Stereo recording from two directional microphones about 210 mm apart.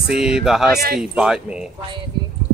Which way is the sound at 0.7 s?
45° right (ahead or behind).